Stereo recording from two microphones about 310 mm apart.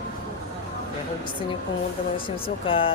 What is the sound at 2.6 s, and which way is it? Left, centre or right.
Speech, centre.